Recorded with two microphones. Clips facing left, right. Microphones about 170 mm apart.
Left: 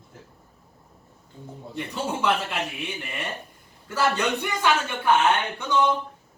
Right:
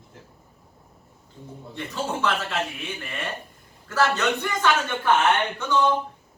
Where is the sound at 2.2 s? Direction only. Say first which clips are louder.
Left 2 dB; 15° left (ahead or behind).